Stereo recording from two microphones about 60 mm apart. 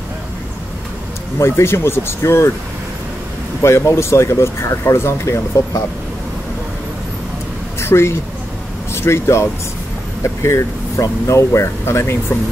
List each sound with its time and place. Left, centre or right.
1.4 s speech: left
3.6 s speech: left
7.8 s speech: left